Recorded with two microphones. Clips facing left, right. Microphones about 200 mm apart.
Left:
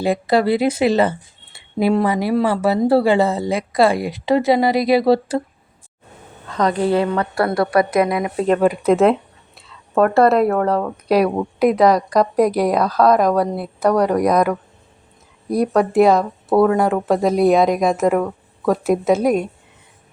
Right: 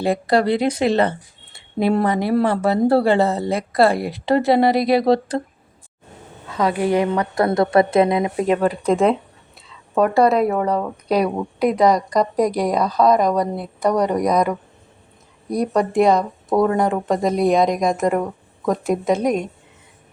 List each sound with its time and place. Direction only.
0.0 s speech: centre (ahead or behind)
6.5 s a woman's voice: 5° right (ahead or behind); by 8.4 s 25° right (ahead or behind)
8.6 s speech: 10° left (ahead or behind)